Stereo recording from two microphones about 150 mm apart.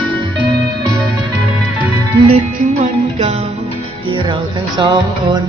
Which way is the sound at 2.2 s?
55° right (ahead or behind).